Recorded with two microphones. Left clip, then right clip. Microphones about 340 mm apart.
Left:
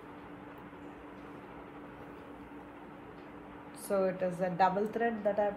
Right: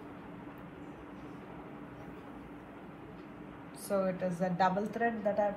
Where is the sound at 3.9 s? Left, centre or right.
Left.